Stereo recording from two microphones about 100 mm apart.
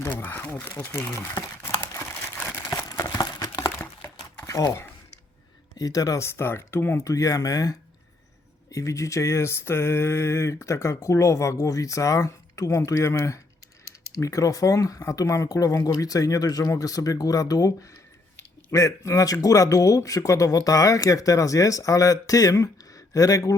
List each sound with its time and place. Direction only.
0.2 s crumpling: 20° left (ahead or behind)
2.6 s a sound: 35° left (ahead or behind)
3.2 s crumpling: 40° left (ahead or behind)
4.4 s speech: 35° left (ahead or behind)
7.1 s speech: 35° left (ahead or behind)